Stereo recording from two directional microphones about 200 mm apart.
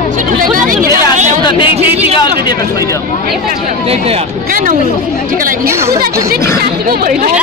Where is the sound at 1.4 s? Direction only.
25° left (ahead or behind).